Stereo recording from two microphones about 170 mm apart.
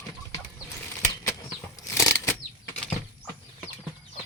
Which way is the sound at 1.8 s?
15° left (ahead or behind).